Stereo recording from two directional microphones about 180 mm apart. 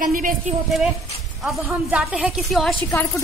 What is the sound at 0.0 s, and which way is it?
Speech, 50° right (ahead or behind).